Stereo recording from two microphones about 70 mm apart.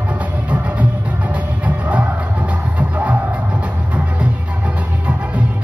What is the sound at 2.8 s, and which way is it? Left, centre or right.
Music, right.